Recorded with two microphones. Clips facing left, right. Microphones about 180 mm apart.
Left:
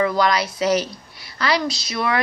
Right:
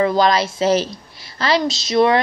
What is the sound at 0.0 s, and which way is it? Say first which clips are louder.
A woman's voice: right 3 dB; 30° right (ahead or behind).